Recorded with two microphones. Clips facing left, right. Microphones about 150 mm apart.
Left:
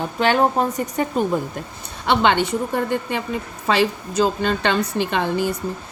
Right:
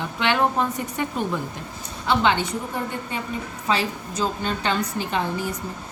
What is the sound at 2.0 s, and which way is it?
A woman's voice, 70° left (ahead or behind).